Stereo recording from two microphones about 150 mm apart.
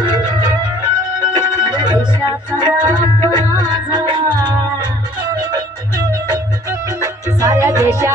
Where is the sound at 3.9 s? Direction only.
30° right (ahead or behind).